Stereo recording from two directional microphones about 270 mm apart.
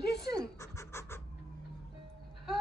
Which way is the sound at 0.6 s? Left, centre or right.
Centre.